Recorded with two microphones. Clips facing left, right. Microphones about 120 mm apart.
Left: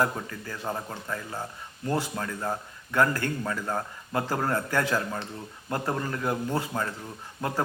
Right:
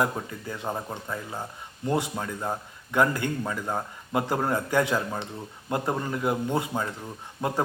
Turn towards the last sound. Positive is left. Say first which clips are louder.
# right 2 dB
turn(degrees=-15)  # may be behind; listen again after turning